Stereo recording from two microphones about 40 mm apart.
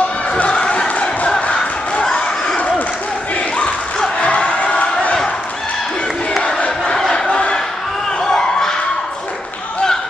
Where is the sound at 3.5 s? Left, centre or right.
Left.